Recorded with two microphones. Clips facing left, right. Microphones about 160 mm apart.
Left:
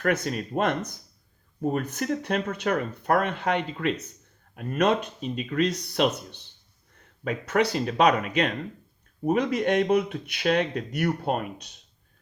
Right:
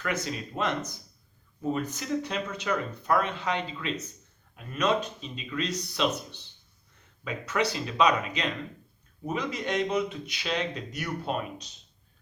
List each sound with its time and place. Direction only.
0.0 s speech: 55° left (ahead or behind)